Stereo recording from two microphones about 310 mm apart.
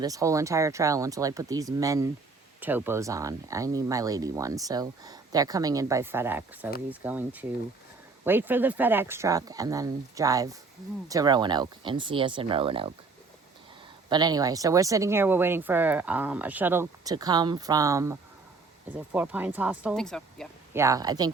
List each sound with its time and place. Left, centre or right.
0.0 s speech: centre
14.1 s speech: centre
20.7 s speech: centre